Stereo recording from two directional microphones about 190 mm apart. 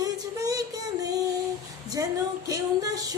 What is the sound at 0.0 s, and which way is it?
Music, 20° right (ahead or behind).